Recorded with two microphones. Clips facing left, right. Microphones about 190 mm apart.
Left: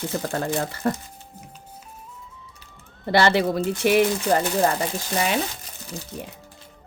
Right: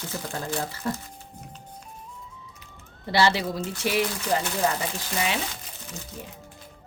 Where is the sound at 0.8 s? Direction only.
60° left (ahead or behind).